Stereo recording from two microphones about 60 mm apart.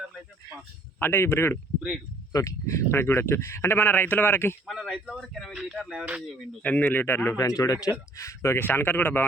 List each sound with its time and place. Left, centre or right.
0.9 s speech: left
2.3 s speech: left
4.6 s speech: centre
5.5 s speech: centre
6.6 s speech: left
7.3 s speech: left
8.1 s speech: left